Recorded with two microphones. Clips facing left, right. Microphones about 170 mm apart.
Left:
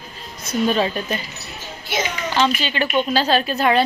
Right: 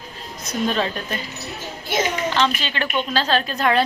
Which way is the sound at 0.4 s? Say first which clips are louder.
Left 3 dB; 5° left (ahead or behind).